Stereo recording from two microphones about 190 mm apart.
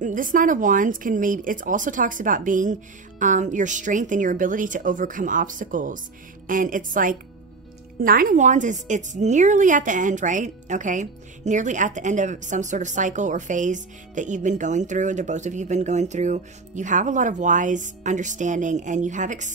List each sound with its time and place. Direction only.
0.0 s a woman's voice: 45° right (ahead or behind)